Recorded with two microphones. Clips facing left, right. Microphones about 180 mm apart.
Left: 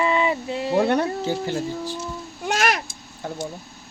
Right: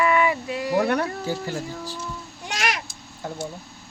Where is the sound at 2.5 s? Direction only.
50° left (ahead or behind).